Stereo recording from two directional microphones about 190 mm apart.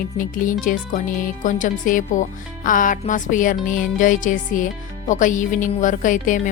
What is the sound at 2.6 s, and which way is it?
Music, 45° left (ahead or behind).